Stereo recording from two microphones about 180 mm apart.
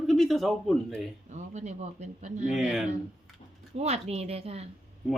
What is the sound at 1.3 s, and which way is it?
Speech, 40° right (ahead or behind).